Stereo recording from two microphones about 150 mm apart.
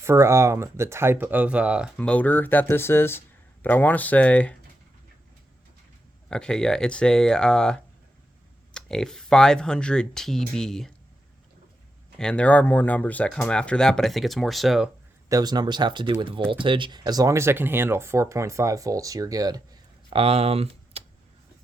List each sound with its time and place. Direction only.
0.0 s speech: 20° right (ahead or behind)
2.0 s speech: 10° left (ahead or behind)
6.2 s speech: 5° left (ahead or behind)
12.1 s speech: 5° left (ahead or behind)
15.3 s speech: 25° right (ahead or behind)
20.1 s speech: 40° right (ahead or behind)